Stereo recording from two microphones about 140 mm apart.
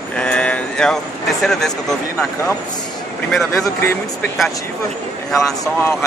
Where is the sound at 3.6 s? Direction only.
20° left (ahead or behind).